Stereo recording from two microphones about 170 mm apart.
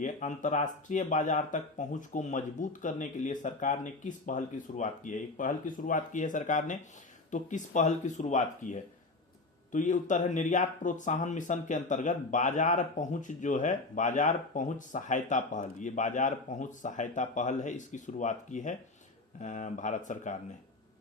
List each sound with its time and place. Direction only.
0.0 s speech: 45° left (ahead or behind)